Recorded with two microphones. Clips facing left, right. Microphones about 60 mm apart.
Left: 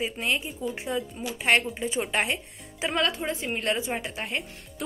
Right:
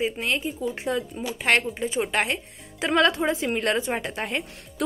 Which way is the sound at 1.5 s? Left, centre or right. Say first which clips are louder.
Right 1 dB; right.